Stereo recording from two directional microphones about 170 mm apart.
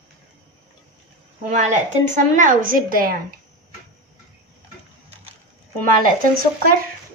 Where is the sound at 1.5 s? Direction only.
45° right (ahead or behind).